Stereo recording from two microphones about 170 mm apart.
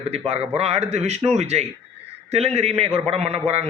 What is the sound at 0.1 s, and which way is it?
A man's voice, 35° right (ahead or behind).